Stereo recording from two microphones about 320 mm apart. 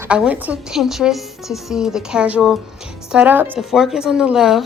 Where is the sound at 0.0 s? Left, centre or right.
Centre.